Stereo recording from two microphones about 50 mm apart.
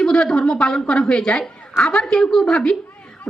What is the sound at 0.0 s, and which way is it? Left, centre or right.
A man's voice, centre.